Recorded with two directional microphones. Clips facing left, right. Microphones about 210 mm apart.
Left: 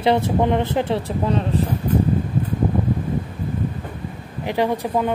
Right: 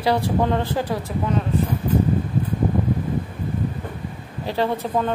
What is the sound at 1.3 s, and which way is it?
Speech, 30° left (ahead or behind).